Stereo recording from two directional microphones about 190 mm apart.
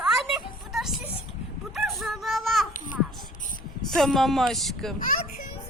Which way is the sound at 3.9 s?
Centre (ahead or behind).